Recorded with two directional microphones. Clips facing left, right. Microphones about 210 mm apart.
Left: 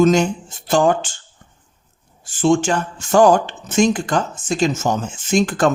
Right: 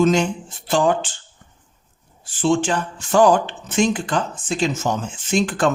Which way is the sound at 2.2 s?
45° left (ahead or behind).